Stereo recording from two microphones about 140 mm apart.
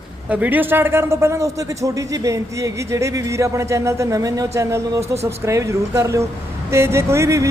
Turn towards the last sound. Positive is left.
turn(degrees=-20)  # may be behind; listen again after turning